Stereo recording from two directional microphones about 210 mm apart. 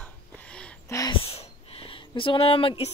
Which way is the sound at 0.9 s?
20° left (ahead or behind).